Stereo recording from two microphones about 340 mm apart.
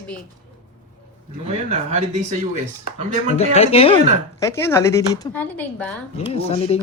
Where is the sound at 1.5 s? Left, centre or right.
Centre.